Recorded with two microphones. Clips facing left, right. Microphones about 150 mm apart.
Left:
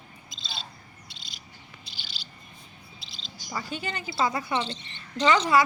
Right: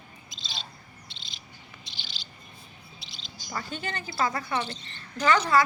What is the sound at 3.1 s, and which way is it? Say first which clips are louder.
Bird: left 1 dB; 10° left (ahead or behind).